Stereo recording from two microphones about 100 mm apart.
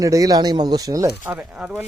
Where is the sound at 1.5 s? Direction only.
10° right (ahead or behind).